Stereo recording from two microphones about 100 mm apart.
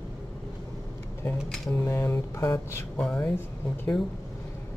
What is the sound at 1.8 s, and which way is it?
Speech, 25° left (ahead or behind).